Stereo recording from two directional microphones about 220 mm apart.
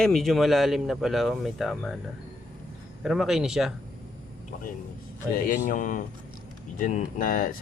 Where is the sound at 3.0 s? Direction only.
Centre (ahead or behind).